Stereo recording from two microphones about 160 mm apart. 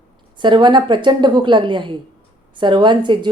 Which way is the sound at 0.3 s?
30° right (ahead or behind).